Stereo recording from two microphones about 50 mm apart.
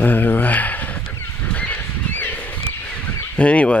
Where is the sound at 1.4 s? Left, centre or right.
Left.